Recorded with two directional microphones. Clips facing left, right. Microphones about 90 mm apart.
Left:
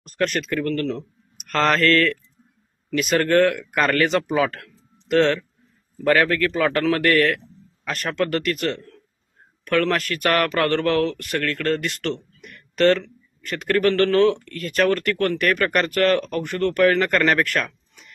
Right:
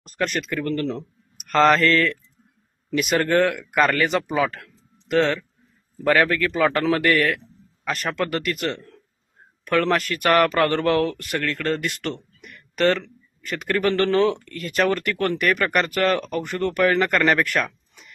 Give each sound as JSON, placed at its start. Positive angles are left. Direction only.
{"t": 0.2, "sound": "a man's voice", "side_deg": -5}
{"t": 0.6, "sound": "speech", "side_deg": -20}
{"t": 3.5, "sound": "a man's voice", "side_deg": 0}
{"t": 12.1, "sound": "a sound", "side_deg": -10}
{"t": 13.4, "sound": "a man's voice", "side_deg": -5}
{"t": 13.9, "sound": "speech", "side_deg": -20}
{"t": 14.6, "sound": "speech", "side_deg": -5}
{"t": 17.4, "sound": "a sound", "side_deg": -10}